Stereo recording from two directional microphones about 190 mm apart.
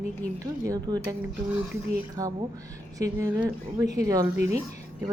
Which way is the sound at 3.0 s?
15° right (ahead or behind).